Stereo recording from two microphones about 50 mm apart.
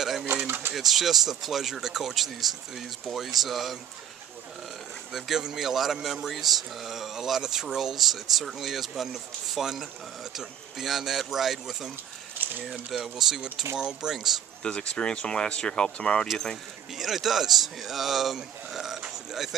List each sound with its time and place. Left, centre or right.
0.0 s pigeon: centre
0.5 s pigeon: right
0.7 s speech: centre
5.1 s speech: centre
12.4 s a sound: right
12.9 s speech: centre
14.6 s speech: centre
16.9 s speech: centre